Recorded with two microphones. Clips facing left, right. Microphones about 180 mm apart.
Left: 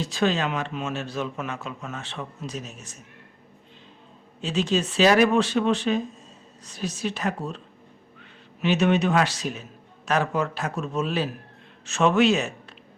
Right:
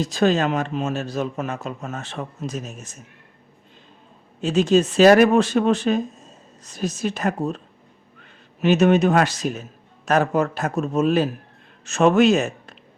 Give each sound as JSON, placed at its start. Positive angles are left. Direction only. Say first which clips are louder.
{"t": 0.0, "sound": "a man's voice", "louder": "right 5 dB", "side_deg": -45}
{"t": 4.4, "sound": "a man's voice", "louder": "right 7 dB", "side_deg": -45}